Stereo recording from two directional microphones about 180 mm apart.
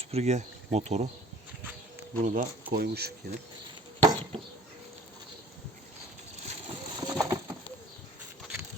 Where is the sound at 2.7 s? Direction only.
60° right (ahead or behind).